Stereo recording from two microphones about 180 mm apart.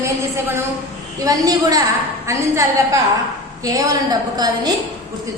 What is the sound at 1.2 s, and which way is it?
A woman's voice, 20° right (ahead or behind).